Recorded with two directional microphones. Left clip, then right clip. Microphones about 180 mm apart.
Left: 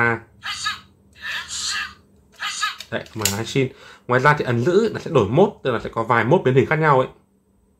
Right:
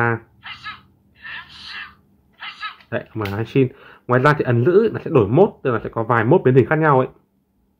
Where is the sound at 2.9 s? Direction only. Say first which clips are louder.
Even; 35° right (ahead or behind).